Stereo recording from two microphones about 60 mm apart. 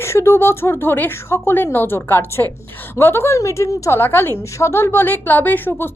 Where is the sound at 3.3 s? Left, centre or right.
Left.